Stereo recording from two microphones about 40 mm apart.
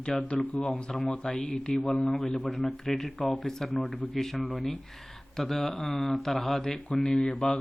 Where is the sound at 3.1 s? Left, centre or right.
Left.